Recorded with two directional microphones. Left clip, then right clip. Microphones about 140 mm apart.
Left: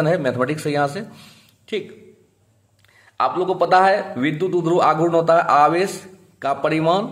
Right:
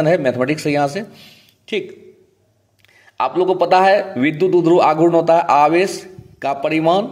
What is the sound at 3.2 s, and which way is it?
A man's voice, 20° right (ahead or behind).